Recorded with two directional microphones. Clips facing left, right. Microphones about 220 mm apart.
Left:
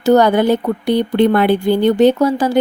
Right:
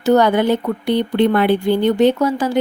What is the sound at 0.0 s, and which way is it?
Speech, 40° left (ahead or behind).